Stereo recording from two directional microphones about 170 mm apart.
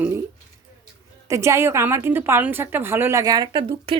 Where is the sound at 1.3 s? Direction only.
15° right (ahead or behind).